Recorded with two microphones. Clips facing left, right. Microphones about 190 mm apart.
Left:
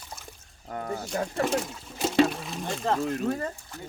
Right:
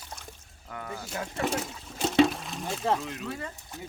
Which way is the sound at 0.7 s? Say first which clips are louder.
Left 5 dB; 40° left (ahead or behind).